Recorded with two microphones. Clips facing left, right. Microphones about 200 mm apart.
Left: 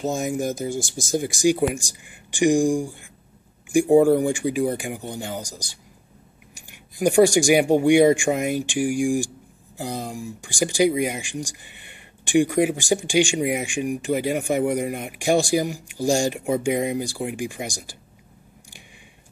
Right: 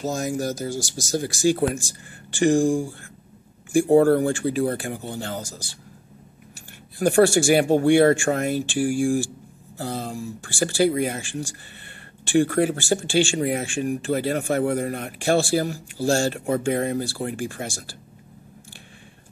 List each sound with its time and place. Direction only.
0.0 s speech: 20° left (ahead or behind)
0.7 s speech: 55° left (ahead or behind)
1.1 s speech: 15° left (ahead or behind)